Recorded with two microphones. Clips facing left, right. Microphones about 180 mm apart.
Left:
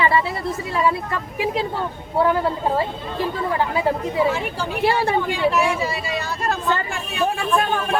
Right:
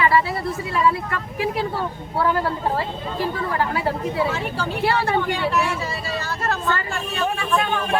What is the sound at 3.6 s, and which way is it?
Speech, 20° left (ahead or behind).